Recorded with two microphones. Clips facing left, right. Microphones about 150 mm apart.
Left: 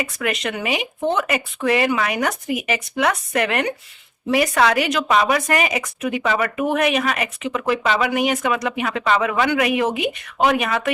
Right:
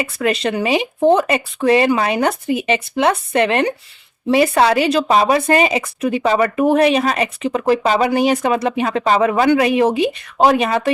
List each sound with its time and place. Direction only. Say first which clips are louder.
0.0 s speech: right 5 dB; 30° right (ahead or behind)